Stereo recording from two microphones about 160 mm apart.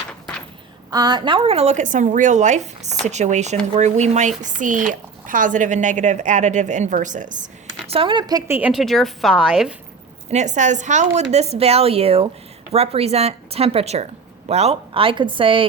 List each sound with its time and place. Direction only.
0.9 s speech: 25° right (ahead or behind); by 7.4 s 55° right (ahead or behind)
7.9 s a woman's voice: 35° right (ahead or behind); by 8.7 s 15° right (ahead or behind)
8.7 s a woman's voice: centre (ahead or behind)
10.3 s a woman's voice: 50° right (ahead or behind); by 15.6 s 30° right (ahead or behind)